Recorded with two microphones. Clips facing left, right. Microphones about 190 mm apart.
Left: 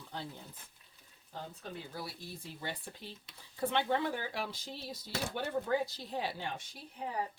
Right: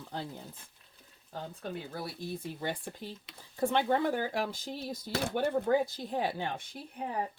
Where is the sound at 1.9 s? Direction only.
55° right (ahead or behind).